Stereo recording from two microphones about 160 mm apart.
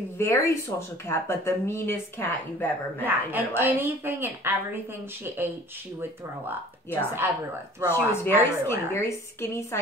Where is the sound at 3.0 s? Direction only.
10° right (ahead or behind).